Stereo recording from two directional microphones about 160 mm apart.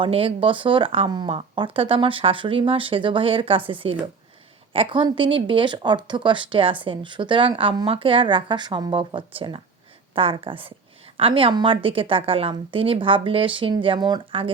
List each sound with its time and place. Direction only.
0.0 s speech: 35° right (ahead or behind)